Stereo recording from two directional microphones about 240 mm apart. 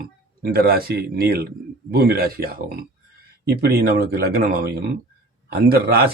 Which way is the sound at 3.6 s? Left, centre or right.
Right.